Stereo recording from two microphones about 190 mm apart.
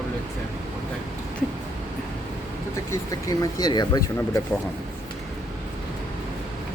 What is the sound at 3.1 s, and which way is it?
Speech, 20° left (ahead or behind).